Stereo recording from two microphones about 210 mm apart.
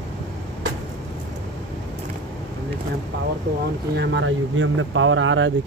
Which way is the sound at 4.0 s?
60° right (ahead or behind).